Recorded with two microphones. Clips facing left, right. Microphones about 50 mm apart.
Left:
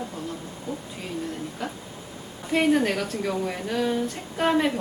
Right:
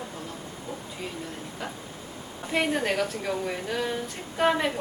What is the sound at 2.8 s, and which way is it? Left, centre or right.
Speech, centre.